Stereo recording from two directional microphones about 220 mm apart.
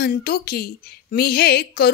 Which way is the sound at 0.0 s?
45° left (ahead or behind).